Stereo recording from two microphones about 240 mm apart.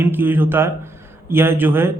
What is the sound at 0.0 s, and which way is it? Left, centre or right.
A man's voice, centre.